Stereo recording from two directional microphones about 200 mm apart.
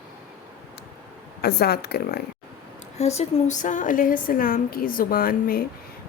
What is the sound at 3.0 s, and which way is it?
A woman's voice, 35° left (ahead or behind).